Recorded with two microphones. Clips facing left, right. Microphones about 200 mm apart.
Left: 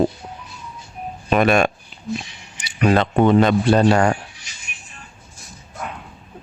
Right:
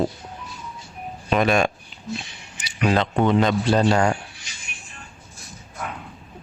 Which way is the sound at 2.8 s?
50° left (ahead or behind).